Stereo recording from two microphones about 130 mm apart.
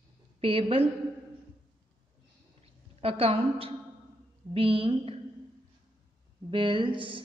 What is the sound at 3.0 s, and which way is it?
A woman's voice, 50° right (ahead or behind).